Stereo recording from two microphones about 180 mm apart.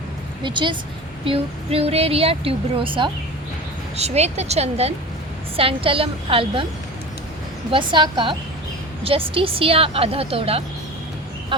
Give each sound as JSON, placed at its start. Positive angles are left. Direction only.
{"t": 0.4, "sound": "a woman's voice", "side_deg": -25}
{"t": 7.7, "sound": "a woman's voice", "side_deg": -30}